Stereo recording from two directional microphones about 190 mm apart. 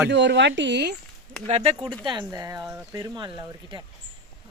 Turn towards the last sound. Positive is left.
turn(degrees=-25)  # may be behind; listen again after turning